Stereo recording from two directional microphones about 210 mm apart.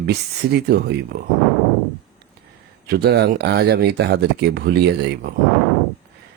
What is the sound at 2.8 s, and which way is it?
Speech, 50° right (ahead or behind).